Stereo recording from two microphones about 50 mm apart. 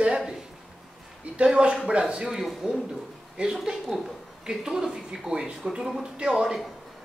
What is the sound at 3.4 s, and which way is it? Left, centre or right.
Speech, centre.